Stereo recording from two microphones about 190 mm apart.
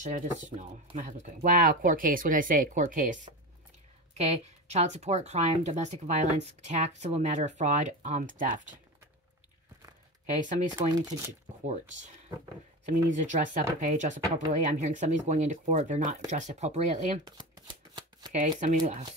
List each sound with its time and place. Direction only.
0.0 s speech: 40° right (ahead or behind)
4.2 s speech: 35° right (ahead or behind)
10.4 s speech: 40° right (ahead or behind)
10.7 s speech: 25° right (ahead or behind)
12.8 s speech: 40° right (ahead or behind)
17.2 s shuffling cards: 20° right (ahead or behind)
18.6 s speech: 40° right (ahead or behind)